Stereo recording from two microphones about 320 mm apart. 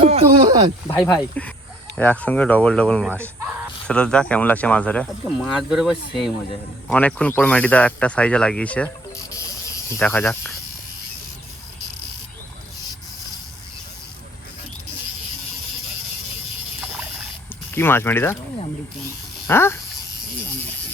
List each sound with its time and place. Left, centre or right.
0.0 s speech: centre
0.9 s speech: centre
17.7 s speech: centre
19.5 s speech: centre